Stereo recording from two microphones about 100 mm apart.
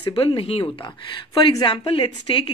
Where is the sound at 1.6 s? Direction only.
55° left (ahead or behind).